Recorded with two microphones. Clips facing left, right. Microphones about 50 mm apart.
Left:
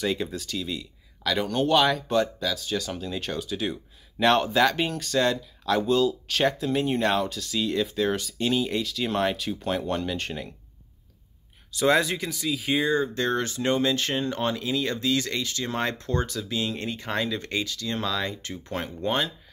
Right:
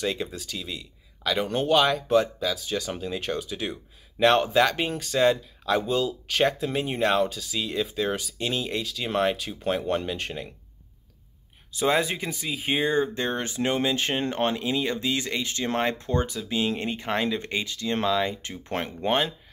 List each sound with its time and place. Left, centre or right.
0.0 s speech: centre
11.7 s speech: centre; by 13.1 s right
13.1 s speech: right
18.7 s speech: right